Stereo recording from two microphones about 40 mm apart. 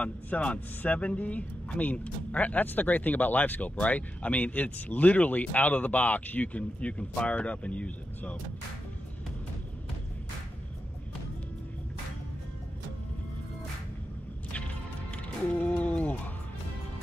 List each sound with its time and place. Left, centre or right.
0.0 s speech: left
14.5 s music: left